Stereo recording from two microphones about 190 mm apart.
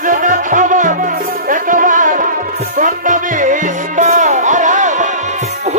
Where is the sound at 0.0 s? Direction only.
45° right (ahead or behind).